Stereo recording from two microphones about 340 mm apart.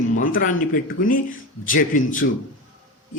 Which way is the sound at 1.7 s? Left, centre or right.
Left.